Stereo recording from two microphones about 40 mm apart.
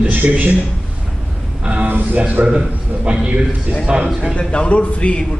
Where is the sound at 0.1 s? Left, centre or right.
Right.